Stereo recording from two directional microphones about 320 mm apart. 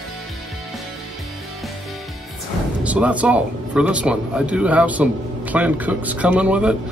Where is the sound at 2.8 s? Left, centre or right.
Centre.